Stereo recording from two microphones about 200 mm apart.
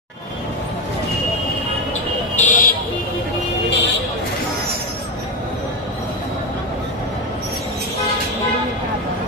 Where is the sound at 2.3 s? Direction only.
40° left (ahead or behind).